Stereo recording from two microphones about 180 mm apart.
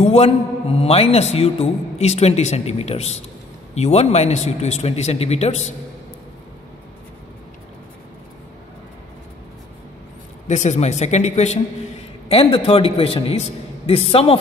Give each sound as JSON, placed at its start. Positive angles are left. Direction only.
{"t": 0.0, "sound": "a man's voice", "side_deg": 35}
{"t": 10.5, "sound": "a man's voice", "side_deg": 40}